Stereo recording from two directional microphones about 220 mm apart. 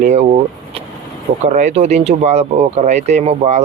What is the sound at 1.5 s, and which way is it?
Speech, 30° right (ahead or behind).